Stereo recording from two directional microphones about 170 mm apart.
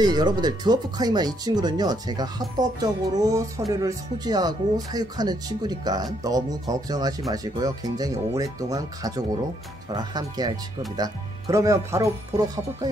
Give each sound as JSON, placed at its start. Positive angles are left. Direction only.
{"t": 0.0, "sound": "speech", "side_deg": -25}